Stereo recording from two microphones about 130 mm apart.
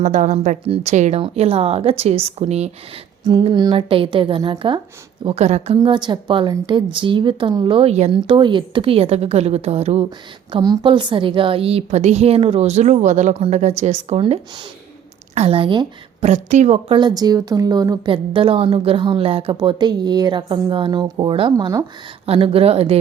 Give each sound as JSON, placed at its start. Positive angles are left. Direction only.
{"t": 0.0, "sound": "a woman's voice", "side_deg": -70}
{"t": 1.2, "sound": "a woman's voice", "side_deg": -50}
{"t": 3.2, "sound": "a woman's voice", "side_deg": -35}
{"t": 5.2, "sound": "a woman's voice", "side_deg": -55}
{"t": 10.6, "sound": "a woman's voice", "side_deg": -35}
{"t": 15.4, "sound": "a woman's voice", "side_deg": -45}
{"t": 16.2, "sound": "a woman's voice", "side_deg": -65}
{"t": 17.0, "sound": "a woman's voice", "side_deg": -30}
{"t": 21.5, "sound": "speech", "side_deg": -25}
{"t": 22.3, "sound": "a woman's voice", "side_deg": -45}